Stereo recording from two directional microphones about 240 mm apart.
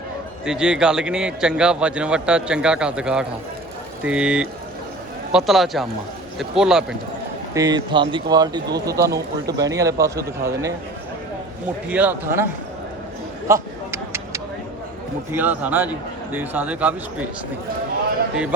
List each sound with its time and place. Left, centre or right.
0.4 s a man's voice: centre
7.5 s a man's voice: centre
11.9 s a man's voice: centre
13.5 s a sound: centre
15.3 s a man's voice: centre